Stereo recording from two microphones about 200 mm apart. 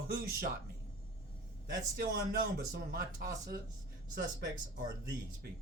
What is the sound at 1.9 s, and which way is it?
Speech, 50° right (ahead or behind).